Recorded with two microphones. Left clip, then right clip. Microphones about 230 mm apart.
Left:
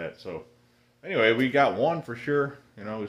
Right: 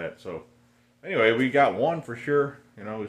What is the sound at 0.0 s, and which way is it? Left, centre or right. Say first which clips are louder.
Speech: right 1 dB; centre.